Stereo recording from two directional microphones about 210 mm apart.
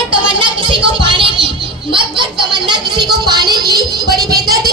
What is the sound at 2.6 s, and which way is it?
A woman's voice, 20° right (ahead or behind).